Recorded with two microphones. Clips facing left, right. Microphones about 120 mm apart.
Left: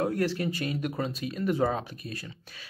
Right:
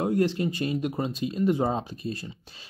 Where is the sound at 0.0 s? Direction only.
20° right (ahead or behind).